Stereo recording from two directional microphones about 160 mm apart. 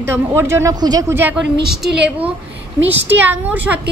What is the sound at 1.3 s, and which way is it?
Speech, 5° right (ahead or behind).